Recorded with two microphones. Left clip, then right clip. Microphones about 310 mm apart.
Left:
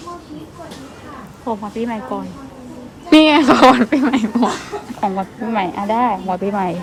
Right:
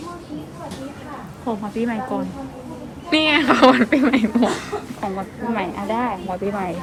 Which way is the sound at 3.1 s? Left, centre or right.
Centre.